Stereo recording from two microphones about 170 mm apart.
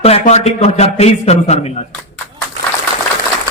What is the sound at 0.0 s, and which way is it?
A man's voice, 40° left (ahead or behind).